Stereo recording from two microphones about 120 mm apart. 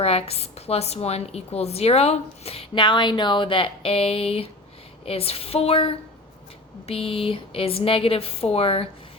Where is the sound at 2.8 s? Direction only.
40° left (ahead or behind).